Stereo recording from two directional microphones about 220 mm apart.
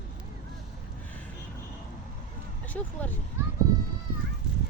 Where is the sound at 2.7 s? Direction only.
5° left (ahead or behind).